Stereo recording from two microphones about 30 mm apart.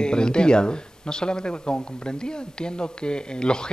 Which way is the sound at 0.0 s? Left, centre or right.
Left.